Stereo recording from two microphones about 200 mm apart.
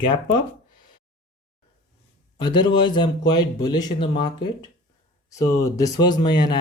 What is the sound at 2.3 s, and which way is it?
Speech, 20° left (ahead or behind).